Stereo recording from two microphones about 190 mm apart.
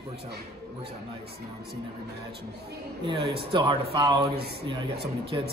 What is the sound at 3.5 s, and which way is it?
Speech, 25° right (ahead or behind).